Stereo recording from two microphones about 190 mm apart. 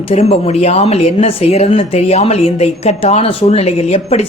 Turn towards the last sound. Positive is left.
turn(degrees=35)  # may be behind; listen again after turning